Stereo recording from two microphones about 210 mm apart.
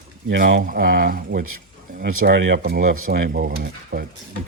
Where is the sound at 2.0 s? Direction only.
55° right (ahead or behind).